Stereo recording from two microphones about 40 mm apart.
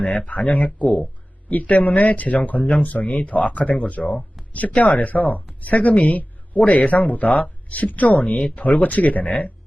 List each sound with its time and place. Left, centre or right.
0.0 s speech: left